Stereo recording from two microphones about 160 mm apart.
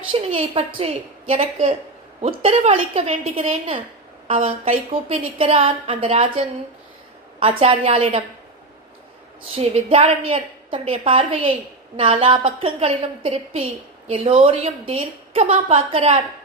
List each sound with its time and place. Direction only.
0.1 s a woman's voice: 35° right (ahead or behind)
9.6 s a woman's voice: 35° right (ahead or behind)